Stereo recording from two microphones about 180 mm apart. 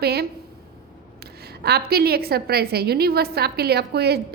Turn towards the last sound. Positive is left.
turn(degrees=-65)  # may be behind; listen again after turning